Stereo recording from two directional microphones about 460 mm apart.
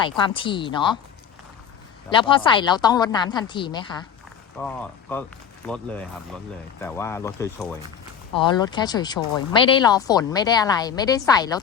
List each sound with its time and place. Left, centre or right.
0.0 s speech: centre
2.0 s speech: centre